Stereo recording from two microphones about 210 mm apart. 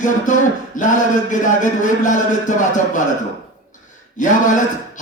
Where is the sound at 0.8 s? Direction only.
35° left (ahead or behind).